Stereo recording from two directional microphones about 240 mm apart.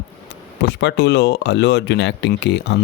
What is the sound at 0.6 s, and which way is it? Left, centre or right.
Speech, left.